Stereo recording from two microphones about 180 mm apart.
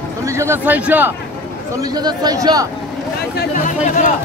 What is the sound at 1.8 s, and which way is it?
Speech, 20° right (ahead or behind).